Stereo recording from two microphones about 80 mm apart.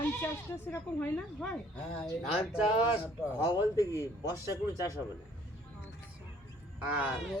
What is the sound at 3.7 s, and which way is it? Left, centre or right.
Speech, left.